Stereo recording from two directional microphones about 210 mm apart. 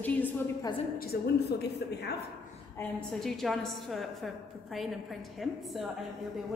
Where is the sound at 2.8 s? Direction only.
5° left (ahead or behind).